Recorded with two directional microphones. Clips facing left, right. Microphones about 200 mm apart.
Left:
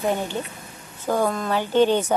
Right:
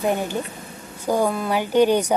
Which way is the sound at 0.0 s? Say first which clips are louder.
Right 2 dB; 10° right (ahead or behind).